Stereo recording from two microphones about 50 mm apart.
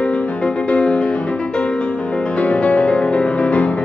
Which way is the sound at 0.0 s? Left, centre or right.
Left.